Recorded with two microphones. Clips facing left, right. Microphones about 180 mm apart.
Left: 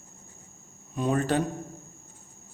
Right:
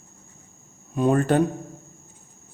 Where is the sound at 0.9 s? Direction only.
50° right (ahead or behind).